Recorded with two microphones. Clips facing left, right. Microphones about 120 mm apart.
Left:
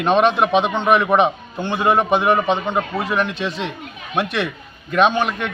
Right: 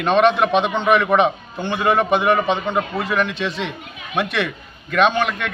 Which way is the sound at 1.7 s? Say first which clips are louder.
Left 1 dB; 15° left (ahead or behind).